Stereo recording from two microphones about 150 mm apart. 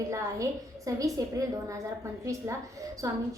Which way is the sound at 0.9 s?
20° right (ahead or behind).